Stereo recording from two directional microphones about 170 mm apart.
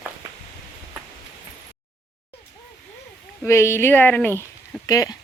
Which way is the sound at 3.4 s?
15° left (ahead or behind).